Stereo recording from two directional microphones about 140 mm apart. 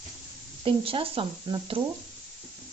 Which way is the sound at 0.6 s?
40° right (ahead or behind).